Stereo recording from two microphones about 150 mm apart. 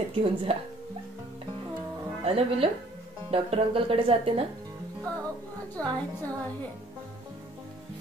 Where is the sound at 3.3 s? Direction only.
40° right (ahead or behind).